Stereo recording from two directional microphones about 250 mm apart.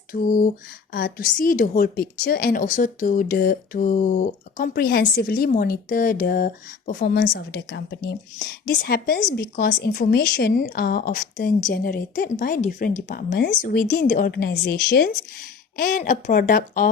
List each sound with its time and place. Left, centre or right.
0.1 s a woman's voice: left